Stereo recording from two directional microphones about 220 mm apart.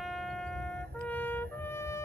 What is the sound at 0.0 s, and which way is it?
Vehicle, centre (ahead or behind).